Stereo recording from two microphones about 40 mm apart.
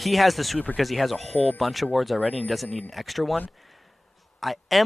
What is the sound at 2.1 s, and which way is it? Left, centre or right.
Speech, left.